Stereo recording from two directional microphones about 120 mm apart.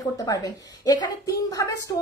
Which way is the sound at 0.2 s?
30° left (ahead or behind).